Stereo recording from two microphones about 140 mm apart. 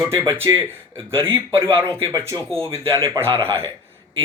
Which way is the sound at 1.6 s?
15° right (ahead or behind).